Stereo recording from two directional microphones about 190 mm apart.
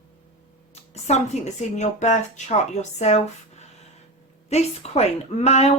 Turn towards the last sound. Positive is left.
turn(degrees=35)  # may be behind; listen again after turning